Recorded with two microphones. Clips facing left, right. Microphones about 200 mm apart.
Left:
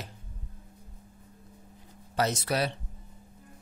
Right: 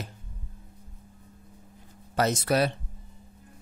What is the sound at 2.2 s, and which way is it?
Speech, 50° right (ahead or behind).